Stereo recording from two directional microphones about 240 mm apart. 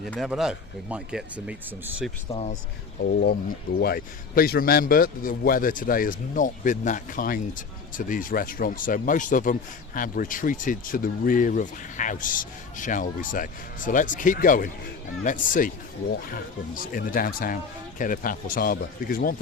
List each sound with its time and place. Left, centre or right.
0.0 s speech: centre
2.3 s speech: left
3.0 s a man's voice: left